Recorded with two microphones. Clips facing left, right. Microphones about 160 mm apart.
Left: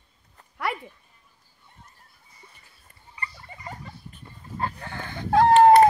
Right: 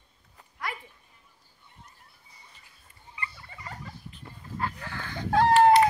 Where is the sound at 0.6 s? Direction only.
70° left (ahead or behind).